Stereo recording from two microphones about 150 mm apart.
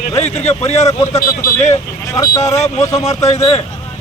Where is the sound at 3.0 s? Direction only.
45° left (ahead or behind).